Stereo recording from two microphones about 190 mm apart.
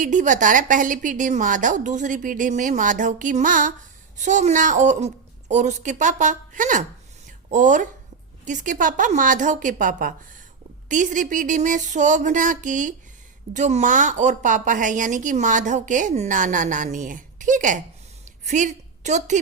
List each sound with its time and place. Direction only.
0.0 s a woman's voice: 40° right (ahead or behind)